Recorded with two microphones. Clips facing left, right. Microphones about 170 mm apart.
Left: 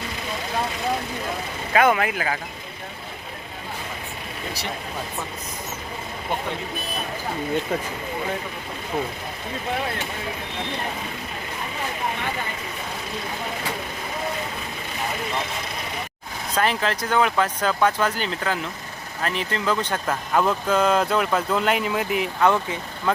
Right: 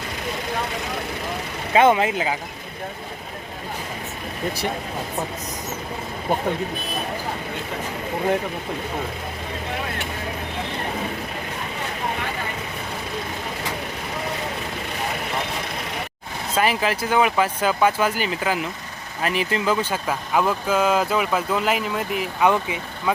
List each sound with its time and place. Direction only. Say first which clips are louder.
1.7 s speech: right 3 dB; 25° right (ahead or behind)
16.6 s speech: right 2 dB; 5° right (ahead or behind)
22.4 s speech: right 2 dB; 15° right (ahead or behind)